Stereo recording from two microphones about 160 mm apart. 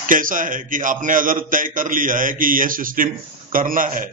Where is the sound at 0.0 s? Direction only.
55° right (ahead or behind).